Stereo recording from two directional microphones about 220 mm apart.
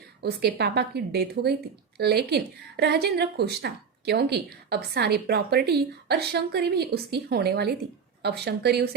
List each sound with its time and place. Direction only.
0.2 s a woman's voice: 50° right (ahead or behind)